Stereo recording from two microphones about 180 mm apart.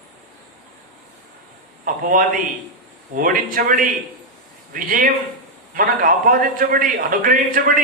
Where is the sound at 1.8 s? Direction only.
50° right (ahead or behind).